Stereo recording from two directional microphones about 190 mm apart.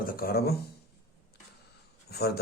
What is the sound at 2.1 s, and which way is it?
Speech, 55° left (ahead or behind).